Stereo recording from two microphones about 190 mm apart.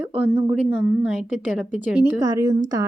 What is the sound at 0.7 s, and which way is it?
Speech, 90° left.